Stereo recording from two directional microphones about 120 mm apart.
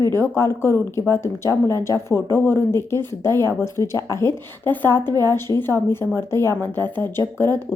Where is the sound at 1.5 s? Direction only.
30° right (ahead or behind).